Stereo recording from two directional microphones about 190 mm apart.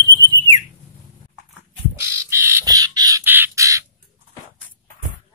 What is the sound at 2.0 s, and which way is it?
Crow, 15° right (ahead or behind).